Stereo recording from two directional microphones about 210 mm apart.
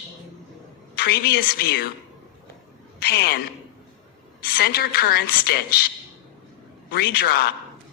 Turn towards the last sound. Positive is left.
turn(degrees=50)  # may be behind; listen again after turning